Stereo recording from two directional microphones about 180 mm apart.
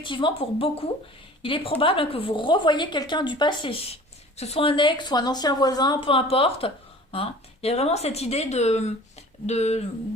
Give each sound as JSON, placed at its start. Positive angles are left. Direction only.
{"t": 0.0, "sound": "a woman's voice", "side_deg": 25}